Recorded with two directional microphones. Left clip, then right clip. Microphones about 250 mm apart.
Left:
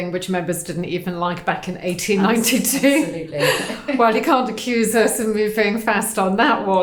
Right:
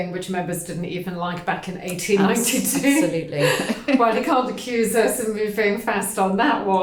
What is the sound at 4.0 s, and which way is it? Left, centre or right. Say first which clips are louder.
A woman's voice: left 4 dB; left.